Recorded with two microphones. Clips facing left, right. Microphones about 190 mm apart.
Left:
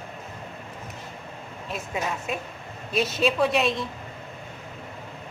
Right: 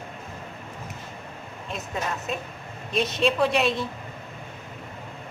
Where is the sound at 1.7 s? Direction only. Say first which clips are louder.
Left 1 dB; 10° left (ahead or behind).